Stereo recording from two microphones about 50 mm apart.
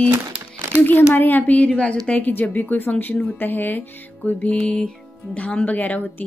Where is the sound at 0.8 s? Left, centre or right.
Left.